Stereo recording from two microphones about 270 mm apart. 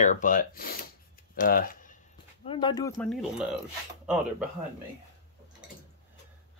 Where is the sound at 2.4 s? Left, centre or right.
Centre.